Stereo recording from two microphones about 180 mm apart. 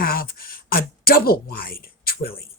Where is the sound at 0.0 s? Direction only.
55° left (ahead or behind).